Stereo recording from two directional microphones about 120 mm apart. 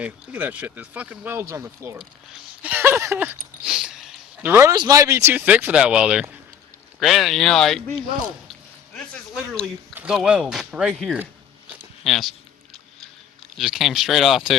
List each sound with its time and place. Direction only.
0.0 s speech: 15° right (ahead or behind)
3.7 s a sound: 5° right (ahead or behind)
4.4 s speech: 15° right (ahead or behind)
4.7 s speech: 30° right (ahead or behind); by 7.8 s 5° left (ahead or behind)
9.9 s a sound: 15° right (ahead or behind)
10.2 s speech: 10° right (ahead or behind)
13.6 s speech: 5° right (ahead or behind)